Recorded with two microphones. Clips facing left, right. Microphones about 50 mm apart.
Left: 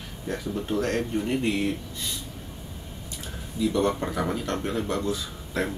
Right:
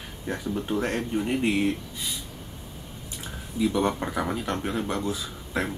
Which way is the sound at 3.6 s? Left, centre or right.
Centre.